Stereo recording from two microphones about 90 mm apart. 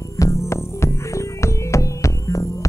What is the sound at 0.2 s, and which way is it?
Music, 35° left (ahead or behind).